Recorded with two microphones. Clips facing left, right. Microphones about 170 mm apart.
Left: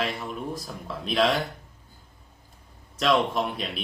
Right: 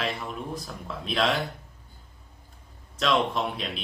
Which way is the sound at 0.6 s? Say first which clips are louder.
Left 2 dB; centre (ahead or behind).